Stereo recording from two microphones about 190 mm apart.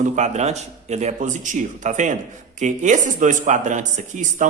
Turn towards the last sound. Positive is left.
turn(degrees=-40)  # may be behind; listen again after turning